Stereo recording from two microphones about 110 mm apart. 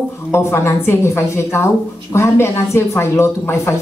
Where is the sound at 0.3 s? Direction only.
25° left (ahead or behind).